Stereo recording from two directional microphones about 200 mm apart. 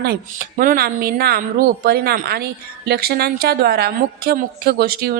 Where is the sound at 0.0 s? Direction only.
45° right (ahead or behind).